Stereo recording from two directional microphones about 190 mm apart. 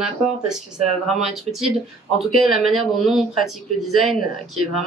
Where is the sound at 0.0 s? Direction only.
5° right (ahead or behind).